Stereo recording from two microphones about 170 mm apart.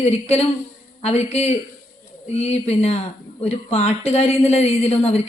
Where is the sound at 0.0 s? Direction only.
35° left (ahead or behind).